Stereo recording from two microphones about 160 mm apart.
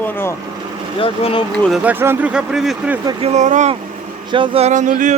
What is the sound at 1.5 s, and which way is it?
Speech, centre (ahead or behind).